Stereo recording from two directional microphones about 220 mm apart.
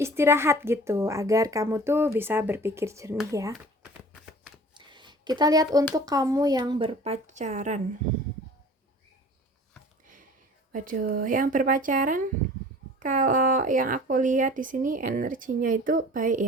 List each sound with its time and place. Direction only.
0.0 s a woman's voice: 10° right (ahead or behind)
4.7 s a sound: 20° right (ahead or behind)
5.9 s speech: 15° right (ahead or behind); by 7.8 s 35° right (ahead or behind)
10.7 s speech: 35° right (ahead or behind)